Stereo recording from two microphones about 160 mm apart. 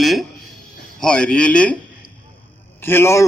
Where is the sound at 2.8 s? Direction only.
15° left (ahead or behind).